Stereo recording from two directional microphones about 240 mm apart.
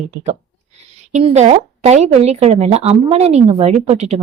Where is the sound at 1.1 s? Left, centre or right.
Right.